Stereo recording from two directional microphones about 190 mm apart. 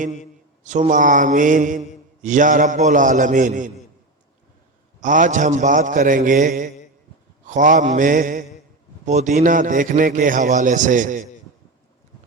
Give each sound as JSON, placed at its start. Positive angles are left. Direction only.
{"t": 0.6, "sound": "a man's voice", "side_deg": -40}
{"t": 4.9, "sound": "a man's voice", "side_deg": -40}